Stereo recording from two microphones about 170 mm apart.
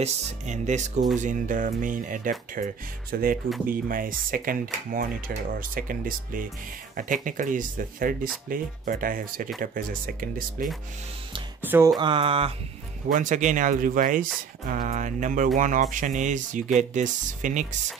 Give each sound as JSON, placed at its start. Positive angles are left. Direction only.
{"t": 0.0, "sound": "speech", "side_deg": -45}
{"t": 11.6, "sound": "speech", "side_deg": -10}
{"t": 12.0, "sound": "a sound", "side_deg": -30}
{"t": 13.1, "sound": "speech", "side_deg": -50}